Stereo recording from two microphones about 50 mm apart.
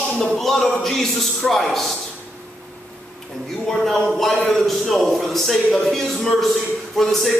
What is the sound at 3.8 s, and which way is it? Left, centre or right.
A man's voice, centre.